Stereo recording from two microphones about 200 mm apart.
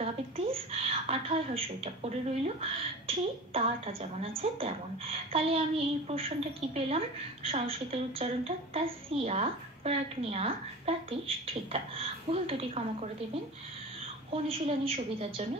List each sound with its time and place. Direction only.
0.0 s a woman's voice: 30° right (ahead or behind)
14.3 s a woman's voice: 30° right (ahead or behind)